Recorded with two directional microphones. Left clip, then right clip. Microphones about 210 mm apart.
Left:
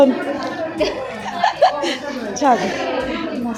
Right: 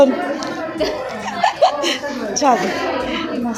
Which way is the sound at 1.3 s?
20° left (ahead or behind).